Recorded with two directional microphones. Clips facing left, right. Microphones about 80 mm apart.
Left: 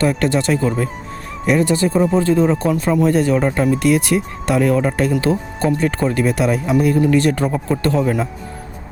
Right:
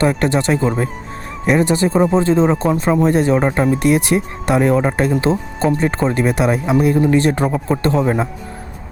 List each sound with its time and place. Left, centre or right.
0.0 s speech: right